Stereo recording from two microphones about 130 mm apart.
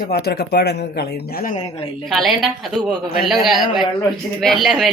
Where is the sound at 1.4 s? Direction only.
65° left (ahead or behind).